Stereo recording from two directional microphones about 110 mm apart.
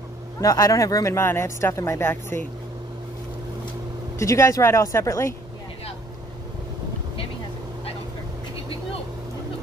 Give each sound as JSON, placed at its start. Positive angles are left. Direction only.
{"t": 0.4, "sound": "speech", "side_deg": 30}
{"t": 4.2, "sound": "speech", "side_deg": 30}